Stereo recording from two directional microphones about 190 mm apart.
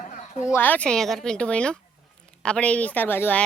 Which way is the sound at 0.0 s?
40° left (ahead or behind).